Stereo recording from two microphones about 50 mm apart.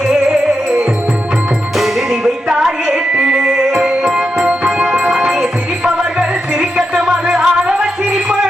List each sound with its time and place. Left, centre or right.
1.8 s music: centre
2.2 s music: centre